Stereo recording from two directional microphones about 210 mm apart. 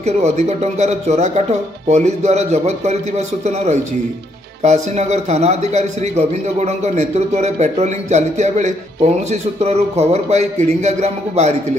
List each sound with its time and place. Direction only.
0.0 s a man's voice: 30° right (ahead or behind)